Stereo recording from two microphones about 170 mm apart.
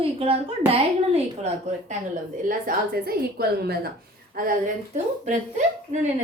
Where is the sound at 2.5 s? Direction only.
60° right (ahead or behind).